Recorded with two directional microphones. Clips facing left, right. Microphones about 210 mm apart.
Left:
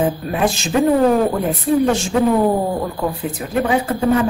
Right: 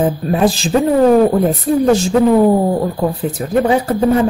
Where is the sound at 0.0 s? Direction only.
35° right (ahead or behind).